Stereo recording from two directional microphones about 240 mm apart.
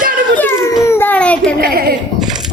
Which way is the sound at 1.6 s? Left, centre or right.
Right.